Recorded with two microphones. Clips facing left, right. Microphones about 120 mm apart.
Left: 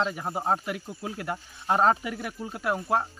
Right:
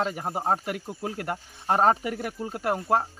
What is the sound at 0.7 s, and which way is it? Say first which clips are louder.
Speech: right 2 dB; 50° right (ahead or behind).